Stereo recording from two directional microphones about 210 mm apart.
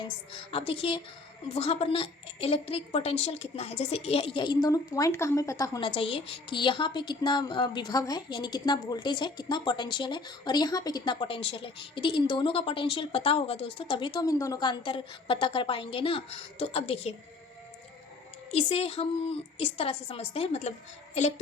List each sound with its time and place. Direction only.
0.5 s a woman's voice: 25° left (ahead or behind)
18.5 s a woman's voice: 30° left (ahead or behind)
21.2 s child singing: 30° left (ahead or behind)